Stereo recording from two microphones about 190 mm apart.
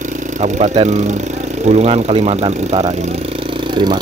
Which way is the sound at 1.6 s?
35° right (ahead or behind).